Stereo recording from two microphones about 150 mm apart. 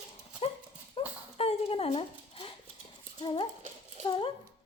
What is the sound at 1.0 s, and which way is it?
Clip-clop, 40° left (ahead or behind).